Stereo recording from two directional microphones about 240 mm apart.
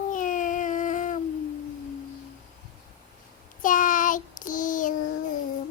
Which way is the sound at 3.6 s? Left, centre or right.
Left.